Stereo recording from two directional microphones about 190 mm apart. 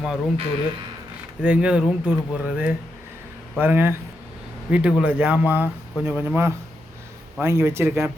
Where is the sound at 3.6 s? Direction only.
10° right (ahead or behind).